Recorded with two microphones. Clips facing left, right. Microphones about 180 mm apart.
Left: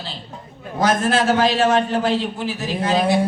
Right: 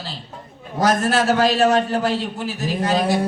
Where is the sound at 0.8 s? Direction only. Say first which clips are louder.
Even; 40° right (ahead or behind).